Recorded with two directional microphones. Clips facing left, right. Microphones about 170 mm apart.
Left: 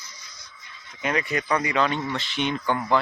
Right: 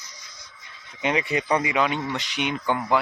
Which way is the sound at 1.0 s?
20° right (ahead or behind).